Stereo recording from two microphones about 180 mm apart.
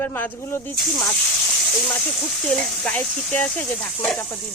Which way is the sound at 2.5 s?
5° left (ahead or behind).